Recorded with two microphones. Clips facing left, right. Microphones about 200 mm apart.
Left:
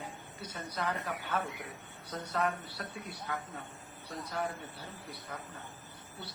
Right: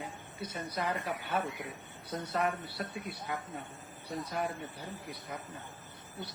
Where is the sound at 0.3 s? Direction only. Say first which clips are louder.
Right 2 dB; 15° right (ahead or behind).